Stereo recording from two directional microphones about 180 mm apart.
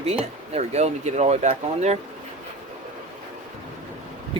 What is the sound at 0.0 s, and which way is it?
Speech, 35° right (ahead or behind).